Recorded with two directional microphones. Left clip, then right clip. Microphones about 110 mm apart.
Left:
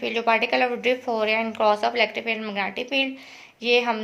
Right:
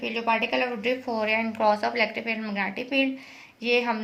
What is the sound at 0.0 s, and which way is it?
Speech, 35° left (ahead or behind).